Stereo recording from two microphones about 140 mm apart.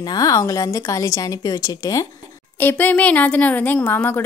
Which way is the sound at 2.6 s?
15° left (ahead or behind).